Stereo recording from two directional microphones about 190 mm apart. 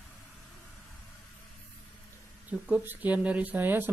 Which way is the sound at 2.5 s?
10° right (ahead or behind).